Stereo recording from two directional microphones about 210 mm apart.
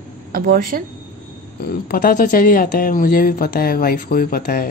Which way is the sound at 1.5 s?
45° left (ahead or behind).